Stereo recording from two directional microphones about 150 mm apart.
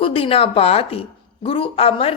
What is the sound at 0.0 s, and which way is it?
Speech, 40° left (ahead or behind).